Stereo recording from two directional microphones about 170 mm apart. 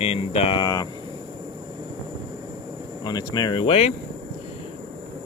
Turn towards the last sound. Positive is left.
turn(degrees=35)  # may be behind; listen again after turning